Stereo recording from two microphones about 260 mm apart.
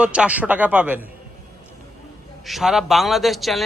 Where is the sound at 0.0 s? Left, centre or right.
Centre.